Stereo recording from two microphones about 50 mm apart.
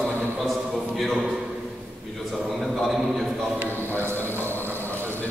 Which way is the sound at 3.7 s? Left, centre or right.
Left.